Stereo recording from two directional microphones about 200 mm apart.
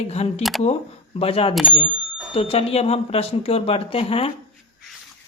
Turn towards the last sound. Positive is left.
turn(degrees=30)  # may be behind; listen again after turning